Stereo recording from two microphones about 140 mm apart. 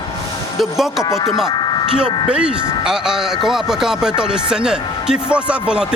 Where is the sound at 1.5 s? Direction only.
30° left (ahead or behind).